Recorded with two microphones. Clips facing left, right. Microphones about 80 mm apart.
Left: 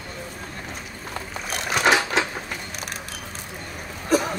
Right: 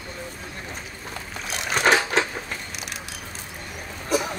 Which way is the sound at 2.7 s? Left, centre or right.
Left.